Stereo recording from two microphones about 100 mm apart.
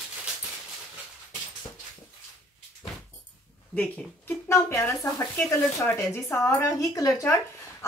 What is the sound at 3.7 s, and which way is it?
A woman's voice, 15° left (ahead or behind).